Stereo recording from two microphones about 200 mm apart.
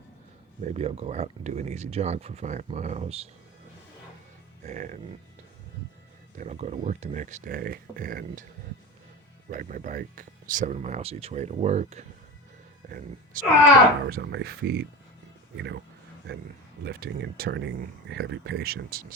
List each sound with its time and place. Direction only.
0.6 s speech: 30° right (ahead or behind)
4.6 s speech: 40° right (ahead or behind)
6.3 s speech: 35° right (ahead or behind)
9.5 s speech: 40° right (ahead or behind)
12.8 s speech: 45° right (ahead or behind)
14.1 s speech: 50° right (ahead or behind)
16.8 s speech: 55° right (ahead or behind)